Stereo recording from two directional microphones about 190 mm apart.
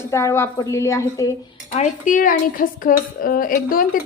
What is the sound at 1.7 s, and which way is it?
Speech, 40° left (ahead or behind).